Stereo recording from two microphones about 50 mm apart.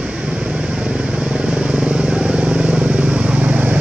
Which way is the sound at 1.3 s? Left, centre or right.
Centre.